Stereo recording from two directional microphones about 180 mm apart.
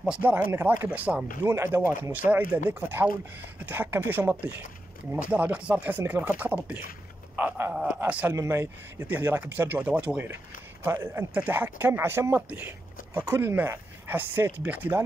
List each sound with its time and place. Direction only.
0.0 s a man's voice: 5° right (ahead or behind)
3.6 s a man's voice: 10° right (ahead or behind)